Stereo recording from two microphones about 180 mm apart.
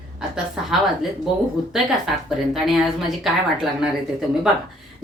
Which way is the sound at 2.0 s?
Centre (ahead or behind).